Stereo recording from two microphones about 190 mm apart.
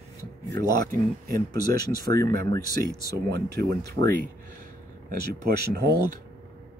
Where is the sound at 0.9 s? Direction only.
50° right (ahead or behind).